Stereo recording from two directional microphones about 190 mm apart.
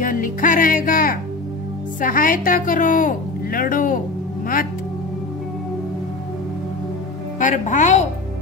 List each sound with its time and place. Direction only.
0.0 s a woman's voice: 45° left (ahead or behind)
7.3 s a woman's voice: 40° left (ahead or behind)